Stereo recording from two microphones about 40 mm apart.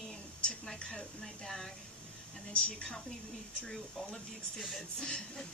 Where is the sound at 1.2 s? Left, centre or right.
Centre.